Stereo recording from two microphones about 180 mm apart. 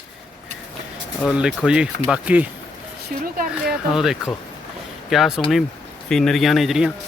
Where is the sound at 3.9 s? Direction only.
Centre (ahead or behind).